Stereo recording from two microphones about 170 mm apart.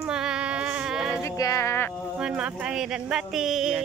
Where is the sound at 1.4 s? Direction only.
20° left (ahead or behind).